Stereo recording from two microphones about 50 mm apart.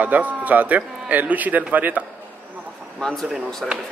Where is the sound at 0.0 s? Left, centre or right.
Right.